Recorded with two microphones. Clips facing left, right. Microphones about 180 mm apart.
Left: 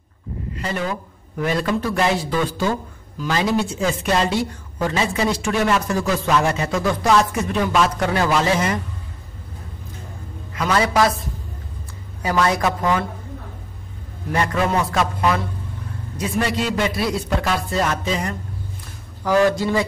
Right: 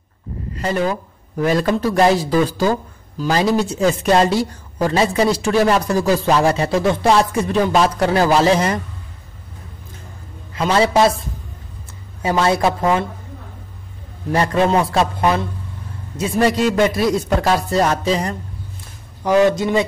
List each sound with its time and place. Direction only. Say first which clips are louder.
0.6 s speech: right 6 dB; 40° right (ahead or behind)
10.5 s a man's voice: right 4 dB; 30° right (ahead or behind)
12.2 s a man's voice: right 3 dB; 25° right (ahead or behind)
14.3 s a man's voice: right 4 dB; 30° right (ahead or behind)
16.4 s speech: right 9 dB; 45° right (ahead or behind)
19.2 s a man's voice: right 3 dB; 20° right (ahead or behind)